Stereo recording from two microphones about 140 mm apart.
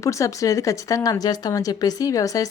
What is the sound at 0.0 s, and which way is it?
Speech, 20° left (ahead or behind).